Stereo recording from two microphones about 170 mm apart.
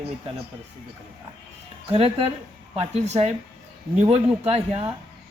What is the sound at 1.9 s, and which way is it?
Speech, 35° right (ahead or behind).